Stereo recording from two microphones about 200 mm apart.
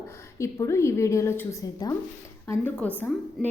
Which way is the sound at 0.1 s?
15° left (ahead or behind).